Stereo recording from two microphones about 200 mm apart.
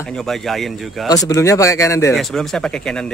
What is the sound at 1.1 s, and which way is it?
Speech, 15° left (ahead or behind).